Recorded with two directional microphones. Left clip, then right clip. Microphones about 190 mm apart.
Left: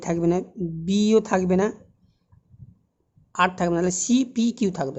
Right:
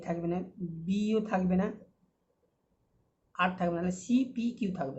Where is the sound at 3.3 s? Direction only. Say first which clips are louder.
Left 9 dB; 60° left (ahead or behind).